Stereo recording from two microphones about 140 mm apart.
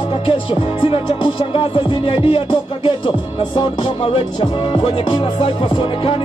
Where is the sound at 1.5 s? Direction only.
40° left (ahead or behind).